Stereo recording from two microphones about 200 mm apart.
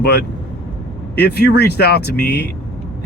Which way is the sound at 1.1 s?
55° left (ahead or behind).